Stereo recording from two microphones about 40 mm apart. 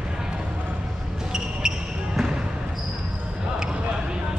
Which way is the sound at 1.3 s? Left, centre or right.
Centre.